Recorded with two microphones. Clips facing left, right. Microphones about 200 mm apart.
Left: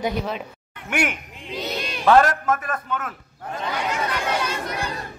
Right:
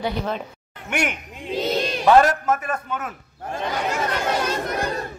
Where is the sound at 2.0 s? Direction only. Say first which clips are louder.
Right 1 dB; 5° right (ahead or behind).